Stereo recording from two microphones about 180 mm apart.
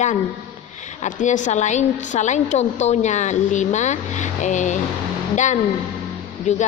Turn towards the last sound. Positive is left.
turn(degrees=40)  # may be behind; listen again after turning